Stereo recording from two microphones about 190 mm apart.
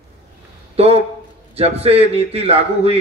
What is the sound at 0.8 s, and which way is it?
A man's voice, 35° right (ahead or behind).